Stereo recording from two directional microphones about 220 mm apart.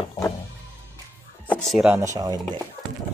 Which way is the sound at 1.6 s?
5° right (ahead or behind).